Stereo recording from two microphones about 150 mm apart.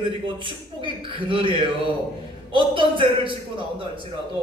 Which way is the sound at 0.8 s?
35° right (ahead or behind).